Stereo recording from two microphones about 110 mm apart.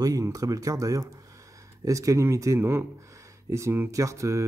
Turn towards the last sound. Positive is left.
turn(degrees=-30)  # may be behind; listen again after turning